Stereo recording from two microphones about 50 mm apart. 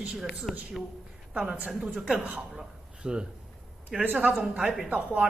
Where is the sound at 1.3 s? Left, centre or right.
Right.